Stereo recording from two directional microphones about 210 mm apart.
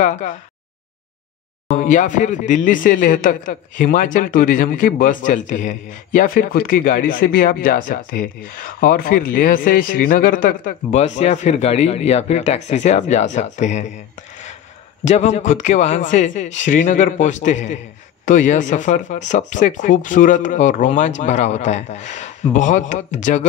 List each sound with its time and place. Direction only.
0.0 s speech: 35° left (ahead or behind)
1.7 s speech: 35° left (ahead or behind)
15.0 s speech: 30° left (ahead or behind)